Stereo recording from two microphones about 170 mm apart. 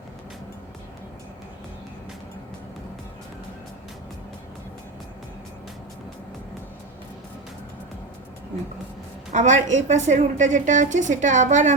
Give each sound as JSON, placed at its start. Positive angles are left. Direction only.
{"t": 9.3, "sound": "a woman's voice", "side_deg": -45}